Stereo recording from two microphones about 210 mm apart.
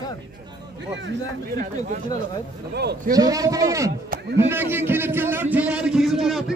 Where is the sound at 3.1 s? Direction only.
15° right (ahead or behind).